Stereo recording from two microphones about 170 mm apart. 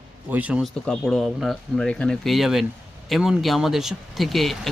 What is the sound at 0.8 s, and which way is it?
Speech, 5° left (ahead or behind).